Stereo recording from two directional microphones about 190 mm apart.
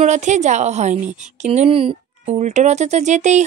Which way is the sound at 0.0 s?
40° right (ahead or behind).